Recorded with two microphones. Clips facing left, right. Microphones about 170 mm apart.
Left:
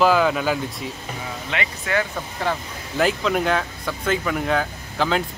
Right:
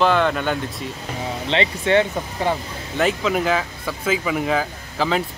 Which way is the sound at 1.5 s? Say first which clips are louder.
Right 7 dB; 25° right (ahead or behind).